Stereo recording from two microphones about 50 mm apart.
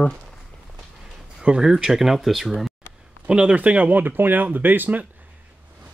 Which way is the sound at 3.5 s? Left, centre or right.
Right.